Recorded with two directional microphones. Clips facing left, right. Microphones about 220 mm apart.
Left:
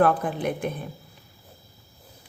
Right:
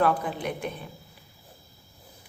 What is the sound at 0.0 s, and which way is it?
Speech, 50° left (ahead or behind).